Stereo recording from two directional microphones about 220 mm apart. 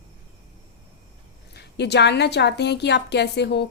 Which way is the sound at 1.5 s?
50° left (ahead or behind).